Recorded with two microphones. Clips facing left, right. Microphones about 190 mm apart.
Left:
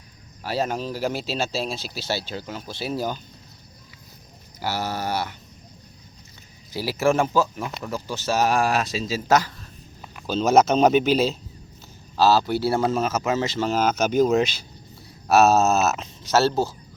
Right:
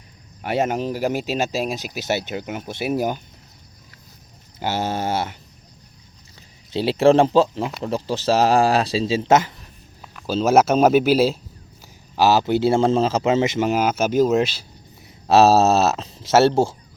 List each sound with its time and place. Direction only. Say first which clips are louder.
0.4 s speech: right 4 dB; 20° right (ahead or behind)
4.6 s speech: right 4 dB; 25° right (ahead or behind)
6.7 s speech: right 6 dB; 30° right (ahead or behind)
10.2 s speech: right 2 dB; 5° right (ahead or behind)
15.3 s speech: right 3 dB; 30° right (ahead or behind)